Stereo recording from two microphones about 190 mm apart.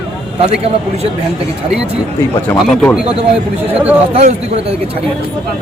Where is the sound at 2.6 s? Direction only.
Centre (ahead or behind).